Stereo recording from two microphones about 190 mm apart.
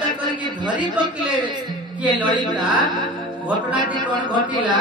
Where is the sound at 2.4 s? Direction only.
25° right (ahead or behind).